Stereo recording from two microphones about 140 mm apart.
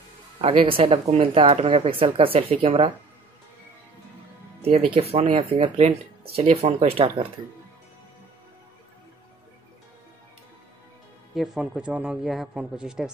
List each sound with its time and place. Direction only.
0.4 s speech: 40° right (ahead or behind)
4.6 s speech: 45° right (ahead or behind)
11.3 s a man's voice: centre (ahead or behind)